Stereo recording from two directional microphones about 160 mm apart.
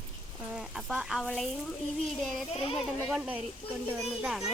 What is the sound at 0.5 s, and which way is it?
Chicken, 5° right (ahead or behind).